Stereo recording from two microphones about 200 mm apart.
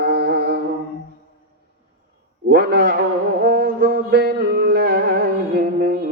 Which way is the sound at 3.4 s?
50° right (ahead or behind).